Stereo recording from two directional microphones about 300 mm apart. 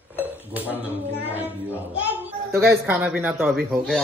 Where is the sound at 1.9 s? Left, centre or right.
Centre.